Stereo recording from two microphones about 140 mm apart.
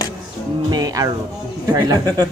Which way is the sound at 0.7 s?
25° right (ahead or behind).